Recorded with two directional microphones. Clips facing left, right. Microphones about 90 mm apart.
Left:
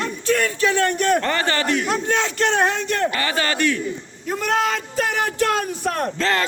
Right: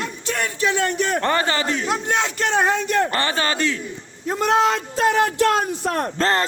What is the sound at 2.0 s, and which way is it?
Speech, 15° right (ahead or behind).